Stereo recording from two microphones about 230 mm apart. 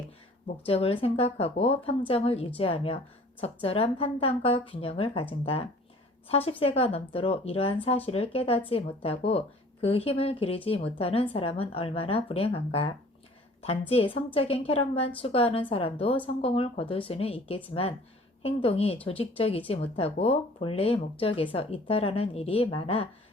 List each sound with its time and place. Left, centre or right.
0.6 s speech: left
6.2 s speech: left